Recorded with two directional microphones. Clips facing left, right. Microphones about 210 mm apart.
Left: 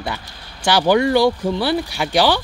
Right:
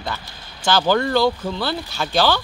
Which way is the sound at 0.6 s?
15° left (ahead or behind).